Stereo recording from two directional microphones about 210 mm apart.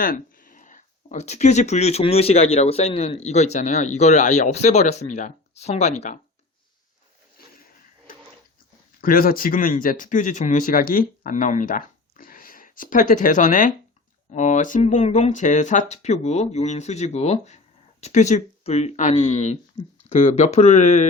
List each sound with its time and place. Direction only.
0.0 s speech: 40° left (ahead or behind)
9.0 s speech: 45° left (ahead or behind)